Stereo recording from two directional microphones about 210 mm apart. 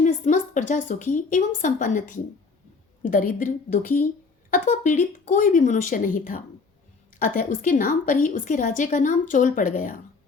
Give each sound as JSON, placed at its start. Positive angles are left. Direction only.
{"t": 0.0, "sound": "a woman's voice", "side_deg": 35}